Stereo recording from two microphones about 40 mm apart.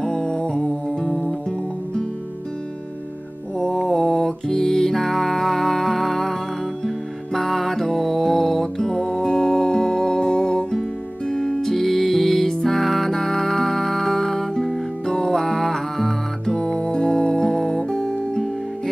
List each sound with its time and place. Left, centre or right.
0.0 s music: centre
3.6 s music: centre
7.3 s music: centre
16.5 s music: centre